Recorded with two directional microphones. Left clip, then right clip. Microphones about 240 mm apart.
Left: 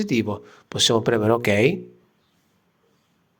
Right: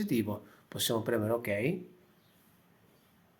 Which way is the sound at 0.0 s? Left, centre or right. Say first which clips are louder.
Left 9 dB; left.